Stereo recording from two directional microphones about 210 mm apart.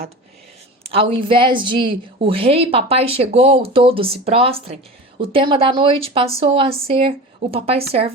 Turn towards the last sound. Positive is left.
turn(degrees=-25)  # may be behind; listen again after turning